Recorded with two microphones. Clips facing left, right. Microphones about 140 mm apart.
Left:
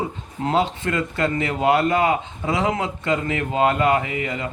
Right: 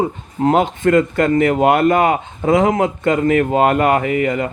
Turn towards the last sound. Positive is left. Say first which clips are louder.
# right 9 dB
turn(degrees=-55)  # may be behind; listen again after turning